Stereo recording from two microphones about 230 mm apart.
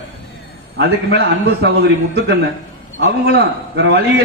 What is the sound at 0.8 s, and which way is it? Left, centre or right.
A man's voice, right.